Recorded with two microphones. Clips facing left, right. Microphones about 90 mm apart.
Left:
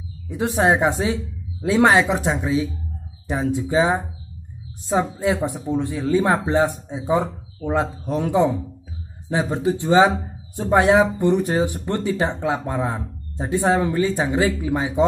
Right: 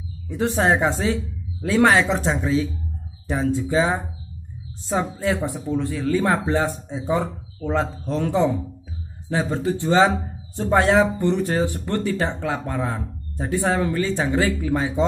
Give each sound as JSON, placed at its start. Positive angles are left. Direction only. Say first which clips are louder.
{"t": 0.3, "sound": "speech", "louder": "left 1 dB", "side_deg": 15}